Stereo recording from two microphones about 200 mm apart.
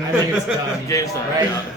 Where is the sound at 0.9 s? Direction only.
15° left (ahead or behind).